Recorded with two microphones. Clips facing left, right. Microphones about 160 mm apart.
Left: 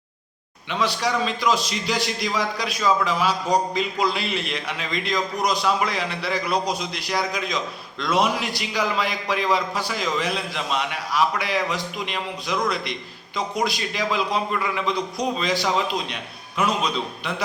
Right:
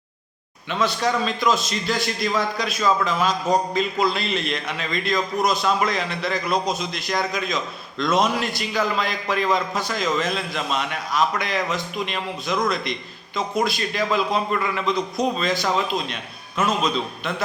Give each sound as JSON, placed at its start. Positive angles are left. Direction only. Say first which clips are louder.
{"t": 0.7, "sound": "a man's voice", "louder": "right 1 dB", "side_deg": 15}
{"t": 15.2, "sound": "a man's voice", "louder": "even", "side_deg": 15}